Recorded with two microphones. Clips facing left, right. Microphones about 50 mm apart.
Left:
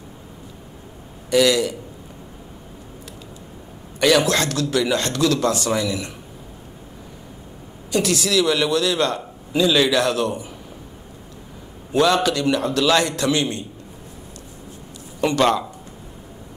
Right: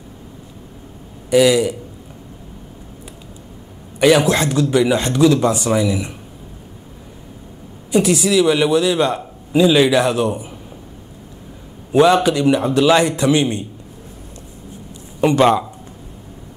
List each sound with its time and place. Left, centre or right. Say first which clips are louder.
1.3 s a man's voice: right 4 dB; centre
4.0 s a man's voice: right 4 dB; centre
7.9 s a man's voice: right 5 dB; centre
11.9 s a man's voice: right 5 dB; right
15.1 s a man's voice: right 5 dB; centre